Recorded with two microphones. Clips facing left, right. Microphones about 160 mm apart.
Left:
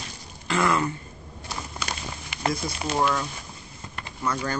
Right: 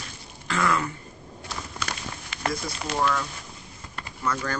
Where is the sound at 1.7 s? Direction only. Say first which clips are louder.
Even; 15° left (ahead or behind).